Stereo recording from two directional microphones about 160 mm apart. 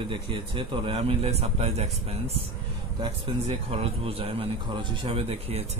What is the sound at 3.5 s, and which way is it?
Speech, 35° right (ahead or behind).